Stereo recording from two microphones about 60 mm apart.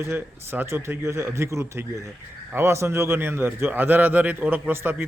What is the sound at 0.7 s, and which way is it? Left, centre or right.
A man's voice, right.